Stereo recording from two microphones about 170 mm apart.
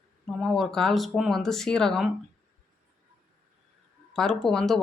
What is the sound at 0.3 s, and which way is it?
Speech, centre (ahead or behind).